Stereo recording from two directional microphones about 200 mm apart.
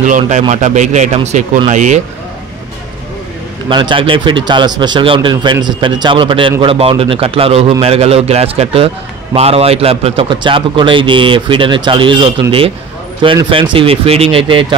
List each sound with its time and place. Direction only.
0.0 s a man's voice: 40° right (ahead or behind)
3.6 s a man's voice: 25° right (ahead or behind)